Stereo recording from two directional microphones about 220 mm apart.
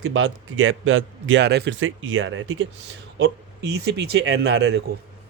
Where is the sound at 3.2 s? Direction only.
50° right (ahead or behind).